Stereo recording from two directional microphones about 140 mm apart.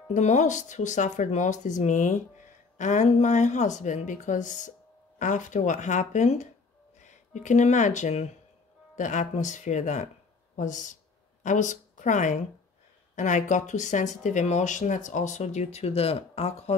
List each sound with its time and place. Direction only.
0.1 s speech: 55° left (ahead or behind)